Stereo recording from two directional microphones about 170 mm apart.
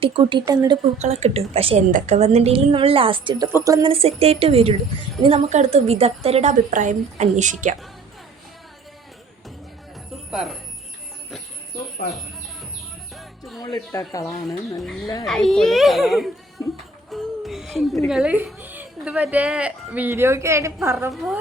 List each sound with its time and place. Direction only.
0.0 s speech: 30° right (ahead or behind)
1.0 s a woman's voice: 40° right (ahead or behind); by 3.8 s 20° right (ahead or behind)
3.8 s a woman's voice: 35° right (ahead or behind)
10.3 s a child's voice: centre (ahead or behind)
13.6 s speech: 20° left (ahead or behind)
14.8 s a child's voice: centre (ahead or behind)
15.0 s speech: 20° left (ahead or behind)
15.3 s a child's voice: 5° left (ahead or behind)
17.1 s a sound: centre (ahead or behind)
18.1 s a woman's voice: 5° right (ahead or behind)